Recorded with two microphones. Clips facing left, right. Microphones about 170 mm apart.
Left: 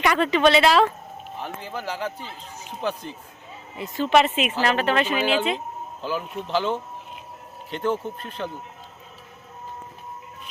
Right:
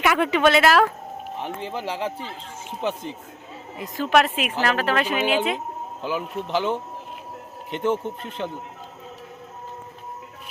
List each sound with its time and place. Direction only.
0.0 s speech: 5° right (ahead or behind)
1.4 s speech: 25° right (ahead or behind)
3.8 s speech: centre (ahead or behind); by 8.4 s 20° right (ahead or behind)